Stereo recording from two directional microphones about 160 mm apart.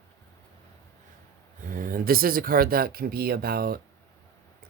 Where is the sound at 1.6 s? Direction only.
60° right (ahead or behind).